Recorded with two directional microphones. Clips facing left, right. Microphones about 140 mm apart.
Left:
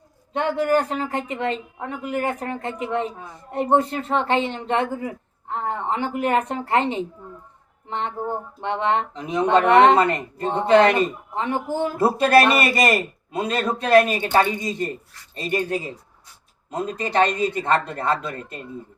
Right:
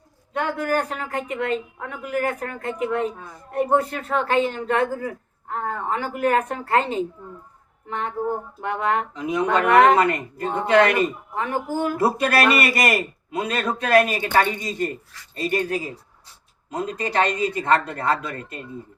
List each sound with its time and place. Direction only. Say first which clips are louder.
0.3 s speech: left 3 dB; 25° left (ahead or behind)